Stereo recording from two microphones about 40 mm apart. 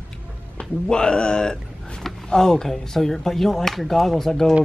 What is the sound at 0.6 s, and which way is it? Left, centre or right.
Speech, left.